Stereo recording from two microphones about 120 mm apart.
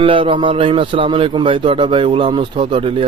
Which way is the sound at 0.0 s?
45° right (ahead or behind).